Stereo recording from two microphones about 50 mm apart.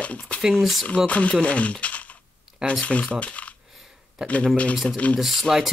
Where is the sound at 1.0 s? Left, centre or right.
Left.